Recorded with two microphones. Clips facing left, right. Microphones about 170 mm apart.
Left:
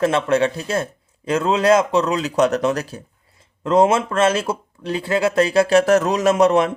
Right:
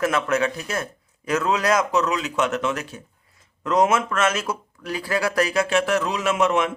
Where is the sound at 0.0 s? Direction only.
30° left (ahead or behind).